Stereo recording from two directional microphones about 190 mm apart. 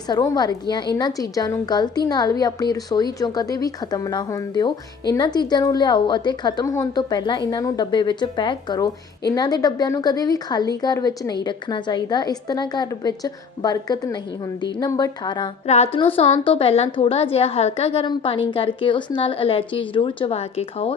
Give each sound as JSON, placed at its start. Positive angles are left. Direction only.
{"t": 0.1, "sound": "a woman's voice", "side_deg": 20}
{"t": 15.6, "sound": "a woman's voice", "side_deg": 35}